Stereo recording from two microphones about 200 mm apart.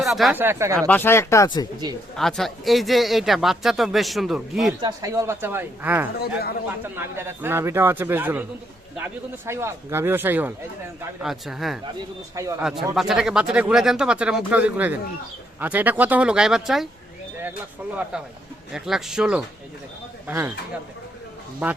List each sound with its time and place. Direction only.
0.0 s a man's voice: centre (ahead or behind)
0.8 s speech: 10° left (ahead or behind)
2.1 s speech: centre (ahead or behind)
4.8 s a man's voice: 20° right (ahead or behind)
6.1 s speech: 50° left (ahead or behind)
6.8 s a man's voice: 10° right (ahead or behind)
9.5 s a man's voice: 15° right (ahead or behind)
12.4 s a man's voice: 15° right (ahead or behind)
12.9 s speech: centre (ahead or behind)
18.7 s a man's voice: centre (ahead or behind)
21.6 s a man's voice: 10° right (ahead or behind)